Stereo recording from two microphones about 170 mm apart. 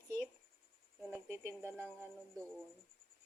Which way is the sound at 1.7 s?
10° left (ahead or behind).